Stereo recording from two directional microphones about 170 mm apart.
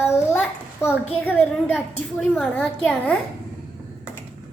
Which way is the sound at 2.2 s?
Centre (ahead or behind).